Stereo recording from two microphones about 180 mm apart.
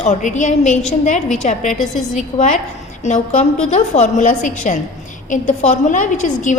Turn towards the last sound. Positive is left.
turn(degrees=45)  # may be behind; listen again after turning